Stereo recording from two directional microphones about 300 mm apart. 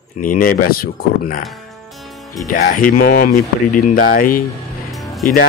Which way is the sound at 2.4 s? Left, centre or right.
Left.